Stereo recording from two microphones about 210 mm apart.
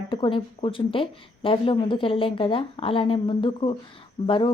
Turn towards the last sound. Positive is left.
turn(degrees=20)  # may be behind; listen again after turning